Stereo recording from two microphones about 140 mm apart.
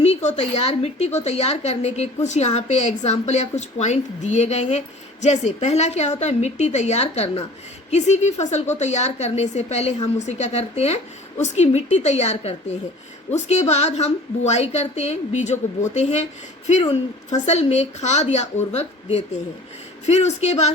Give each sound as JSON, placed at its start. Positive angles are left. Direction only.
{"t": 0.0, "sound": "a woman's voice", "side_deg": 50}
{"t": 17.2, "sound": "a woman's voice", "side_deg": 55}